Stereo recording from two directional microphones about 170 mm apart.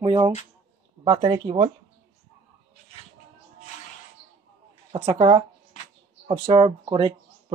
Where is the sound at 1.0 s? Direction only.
30° right (ahead or behind).